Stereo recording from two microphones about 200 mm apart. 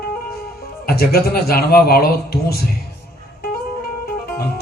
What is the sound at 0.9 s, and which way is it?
Speech, 50° left (ahead or behind).